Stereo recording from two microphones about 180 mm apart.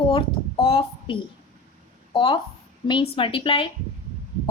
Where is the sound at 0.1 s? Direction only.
30° left (ahead or behind).